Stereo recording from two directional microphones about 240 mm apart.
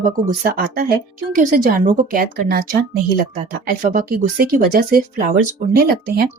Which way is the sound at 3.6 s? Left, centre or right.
Right.